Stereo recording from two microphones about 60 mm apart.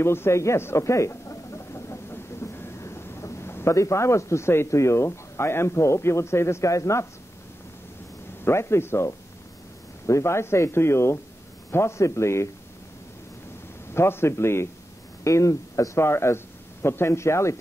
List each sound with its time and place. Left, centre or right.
0.0 s a sound: left
3.7 s speech: left
8.5 s speech: left
13.9 s speech: left
15.2 s speech: left